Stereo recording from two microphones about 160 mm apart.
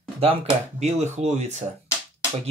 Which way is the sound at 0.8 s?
45° right (ahead or behind).